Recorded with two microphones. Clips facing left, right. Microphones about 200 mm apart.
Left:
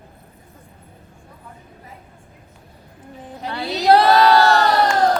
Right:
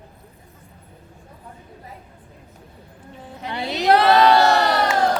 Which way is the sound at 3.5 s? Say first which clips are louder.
Even; 15° right (ahead or behind).